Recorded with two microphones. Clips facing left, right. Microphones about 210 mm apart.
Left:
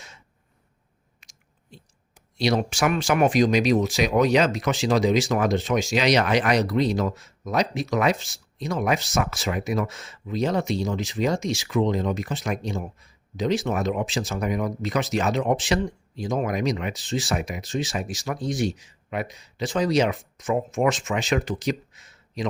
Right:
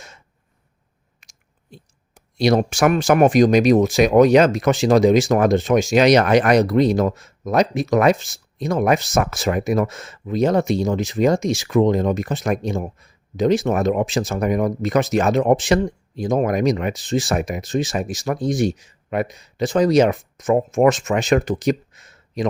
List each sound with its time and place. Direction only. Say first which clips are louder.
1.2 s chewing: right 2 dB; 50° right (ahead or behind)
2.4 s speech: right 6 dB; 45° right (ahead or behind)